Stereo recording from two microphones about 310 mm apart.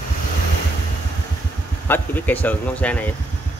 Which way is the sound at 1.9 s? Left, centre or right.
Centre.